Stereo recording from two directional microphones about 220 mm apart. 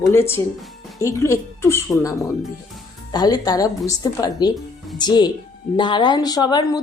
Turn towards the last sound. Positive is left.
turn(degrees=20)  # may be behind; listen again after turning